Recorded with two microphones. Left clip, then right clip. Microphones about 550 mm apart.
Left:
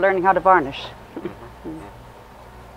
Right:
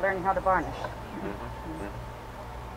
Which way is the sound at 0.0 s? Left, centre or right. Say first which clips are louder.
Left 10 dB; left.